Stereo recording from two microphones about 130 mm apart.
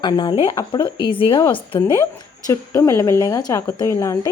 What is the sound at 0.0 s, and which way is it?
Speech, 35° left (ahead or behind).